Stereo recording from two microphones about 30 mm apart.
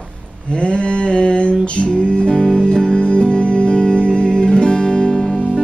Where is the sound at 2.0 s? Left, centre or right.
Left.